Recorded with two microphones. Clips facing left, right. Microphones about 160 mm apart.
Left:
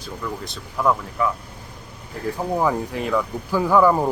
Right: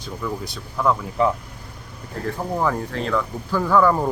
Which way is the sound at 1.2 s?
25° right (ahead or behind).